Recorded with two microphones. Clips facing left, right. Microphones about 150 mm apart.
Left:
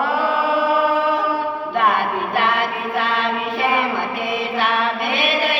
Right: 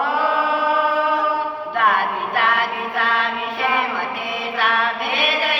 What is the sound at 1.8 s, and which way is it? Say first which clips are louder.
Chant: even; 20° left (ahead or behind).